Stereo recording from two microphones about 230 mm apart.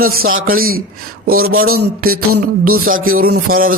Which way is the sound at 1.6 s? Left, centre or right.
Right.